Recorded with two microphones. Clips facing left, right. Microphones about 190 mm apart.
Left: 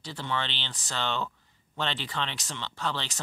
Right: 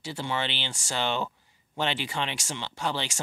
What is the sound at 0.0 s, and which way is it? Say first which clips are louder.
Speech: right 2 dB; 10° right (ahead or behind).